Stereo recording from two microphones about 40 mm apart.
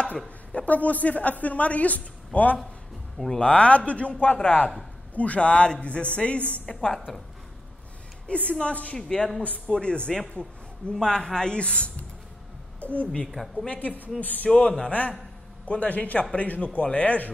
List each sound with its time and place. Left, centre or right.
0.5 s speech: left
6.7 s speech: left
8.3 s speech: left
8.9 s a man's voice: centre
12.9 s speech: left
13.3 s a woman's voice: centre
13.7 s a woman's voice: left
14.6 s speech: left